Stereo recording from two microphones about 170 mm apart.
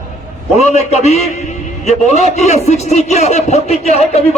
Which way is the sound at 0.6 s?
40° left (ahead or behind).